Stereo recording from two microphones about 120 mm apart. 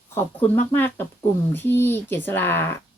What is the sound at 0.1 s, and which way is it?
Speech, 15° left (ahead or behind).